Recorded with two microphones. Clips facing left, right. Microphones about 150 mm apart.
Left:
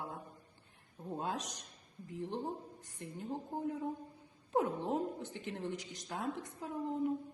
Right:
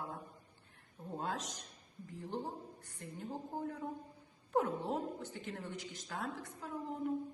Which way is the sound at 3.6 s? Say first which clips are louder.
Left 3 dB; 20° left (ahead or behind).